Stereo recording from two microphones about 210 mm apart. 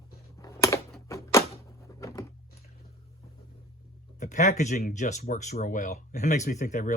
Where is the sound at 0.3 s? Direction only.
15° left (ahead or behind).